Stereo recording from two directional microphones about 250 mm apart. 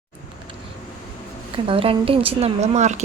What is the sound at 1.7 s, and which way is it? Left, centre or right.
A woman's voice, right.